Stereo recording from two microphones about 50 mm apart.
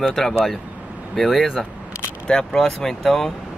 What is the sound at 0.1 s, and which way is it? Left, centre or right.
Speech, centre.